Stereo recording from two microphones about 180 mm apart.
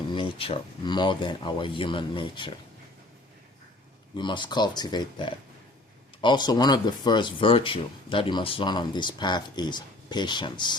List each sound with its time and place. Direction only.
0.1 s speech: 30° left (ahead or behind)
4.2 s speech: 25° left (ahead or behind)